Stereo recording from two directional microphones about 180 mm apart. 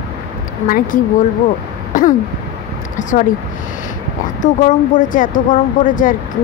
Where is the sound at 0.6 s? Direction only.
50° left (ahead or behind).